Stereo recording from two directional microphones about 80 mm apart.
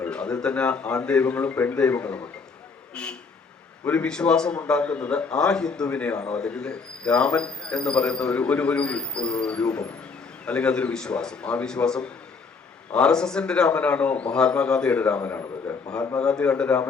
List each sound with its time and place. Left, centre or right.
0.0 s a man's voice: centre